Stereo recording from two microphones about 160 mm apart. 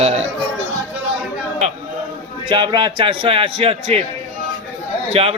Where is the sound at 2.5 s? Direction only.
30° right (ahead or behind).